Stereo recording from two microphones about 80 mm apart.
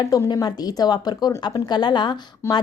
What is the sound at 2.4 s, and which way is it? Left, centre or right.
Speech, left.